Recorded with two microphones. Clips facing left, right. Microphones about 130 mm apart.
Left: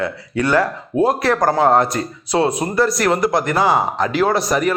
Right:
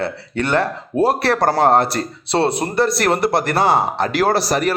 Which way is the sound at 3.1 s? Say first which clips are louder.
Even; 65° right (ahead or behind).